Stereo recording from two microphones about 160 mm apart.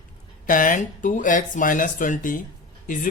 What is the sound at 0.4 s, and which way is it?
Speech, 60° left (ahead or behind).